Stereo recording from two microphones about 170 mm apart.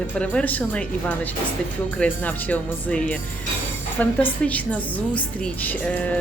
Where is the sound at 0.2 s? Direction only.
10° left (ahead or behind).